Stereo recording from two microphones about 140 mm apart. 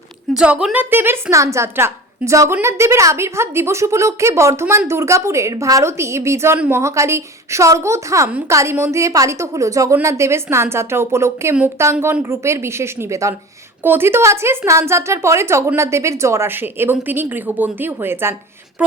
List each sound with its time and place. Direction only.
0.3 s a woman's voice: 5° right (ahead or behind)